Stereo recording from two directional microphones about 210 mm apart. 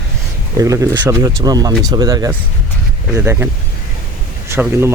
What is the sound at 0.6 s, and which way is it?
Speech, 15° right (ahead or behind).